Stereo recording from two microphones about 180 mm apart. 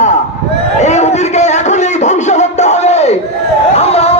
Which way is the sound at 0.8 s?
40° left (ahead or behind).